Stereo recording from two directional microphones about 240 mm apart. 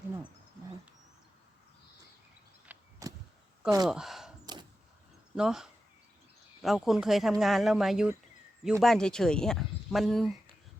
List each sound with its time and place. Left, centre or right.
2.7 s a sound: centre
3.8 s speech: centre
4.5 s vehicle: centre
5.4 s speech: centre